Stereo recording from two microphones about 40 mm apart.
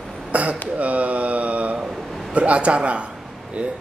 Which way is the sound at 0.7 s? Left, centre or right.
Right.